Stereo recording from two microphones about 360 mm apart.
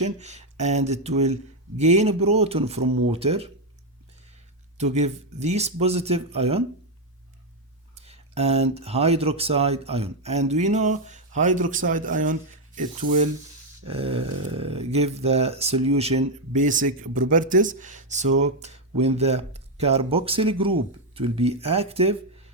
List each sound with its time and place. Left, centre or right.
0.0 s speech: centre
4.8 s speech: centre
7.9 s speech: centre